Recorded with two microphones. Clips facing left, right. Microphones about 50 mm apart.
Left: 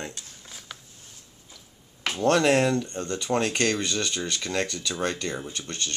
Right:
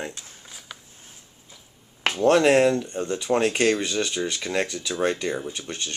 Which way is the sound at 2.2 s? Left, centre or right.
Centre.